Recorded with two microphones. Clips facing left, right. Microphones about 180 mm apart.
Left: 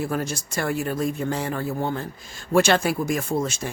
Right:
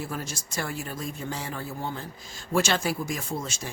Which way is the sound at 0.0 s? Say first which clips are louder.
Left 8 dB; 60° left (ahead or behind).